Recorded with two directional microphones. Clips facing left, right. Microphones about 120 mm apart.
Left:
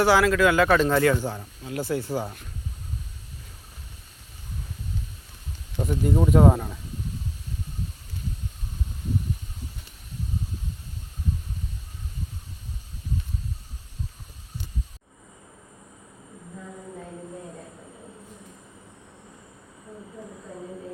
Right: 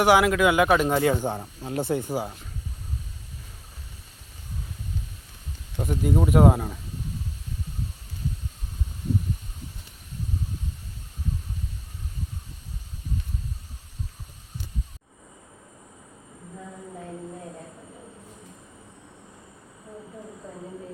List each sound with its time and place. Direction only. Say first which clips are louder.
0.0 s speech: even; 15° right (ahead or behind)
1.4 s speech: right 3 dB; 35° right (ahead or behind)
1.9 s speech: left 1 dB; 15° right (ahead or behind)
5.7 s speech: even; centre (ahead or behind)